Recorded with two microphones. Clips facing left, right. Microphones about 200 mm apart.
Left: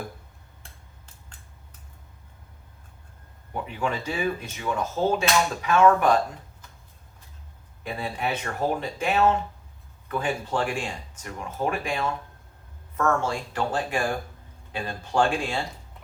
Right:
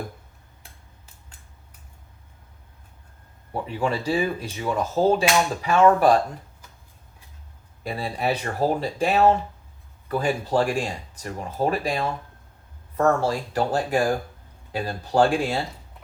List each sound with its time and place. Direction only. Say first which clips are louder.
3.5 s speech: right 3 dB; 35° right (ahead or behind)
7.9 s speech: right 3 dB; 35° right (ahead or behind)